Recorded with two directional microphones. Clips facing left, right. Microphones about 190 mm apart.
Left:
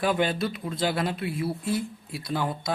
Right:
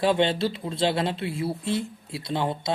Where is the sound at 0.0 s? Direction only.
25° right (ahead or behind).